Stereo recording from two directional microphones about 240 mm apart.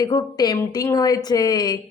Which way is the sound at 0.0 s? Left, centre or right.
Centre.